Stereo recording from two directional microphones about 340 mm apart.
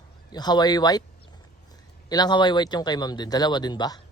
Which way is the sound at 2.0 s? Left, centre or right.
Centre.